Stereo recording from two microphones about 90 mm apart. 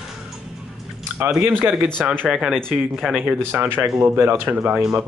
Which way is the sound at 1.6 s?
25° right (ahead or behind).